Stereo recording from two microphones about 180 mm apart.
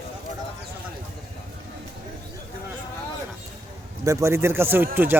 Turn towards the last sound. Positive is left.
turn(degrees=-10)  # may be behind; listen again after turning